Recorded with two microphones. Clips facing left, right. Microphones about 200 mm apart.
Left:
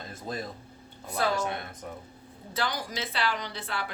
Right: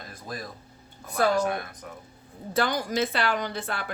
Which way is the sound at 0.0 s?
25° left (ahead or behind).